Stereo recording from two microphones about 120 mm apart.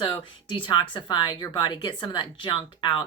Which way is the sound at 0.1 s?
45° left (ahead or behind).